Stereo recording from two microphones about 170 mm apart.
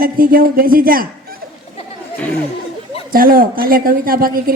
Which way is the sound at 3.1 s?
60° right (ahead or behind).